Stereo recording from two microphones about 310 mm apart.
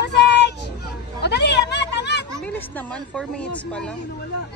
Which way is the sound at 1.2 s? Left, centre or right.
Left.